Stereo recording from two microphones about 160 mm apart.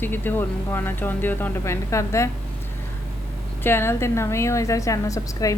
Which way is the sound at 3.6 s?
15° left (ahead or behind).